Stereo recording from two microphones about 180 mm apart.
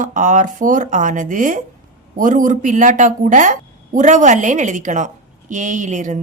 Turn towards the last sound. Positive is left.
turn(degrees=-45)  # may be behind; listen again after turning